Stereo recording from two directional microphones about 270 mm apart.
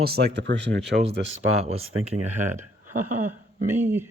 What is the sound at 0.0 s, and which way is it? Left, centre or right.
Speech, right.